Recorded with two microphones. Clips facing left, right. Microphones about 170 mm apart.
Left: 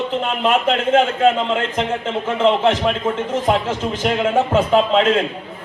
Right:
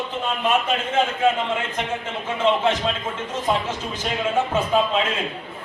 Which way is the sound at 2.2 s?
70° left (ahead or behind).